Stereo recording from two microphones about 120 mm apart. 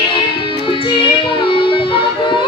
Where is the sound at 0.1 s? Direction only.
45° left (ahead or behind).